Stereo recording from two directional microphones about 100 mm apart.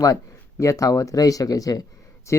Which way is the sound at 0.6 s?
35° left (ahead or behind).